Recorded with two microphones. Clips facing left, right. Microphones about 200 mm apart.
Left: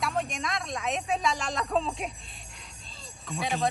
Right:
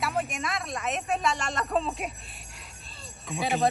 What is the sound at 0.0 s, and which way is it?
A woman's voice, centre (ahead or behind).